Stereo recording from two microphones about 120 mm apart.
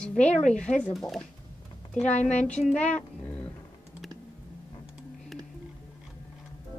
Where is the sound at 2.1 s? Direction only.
75° left (ahead or behind).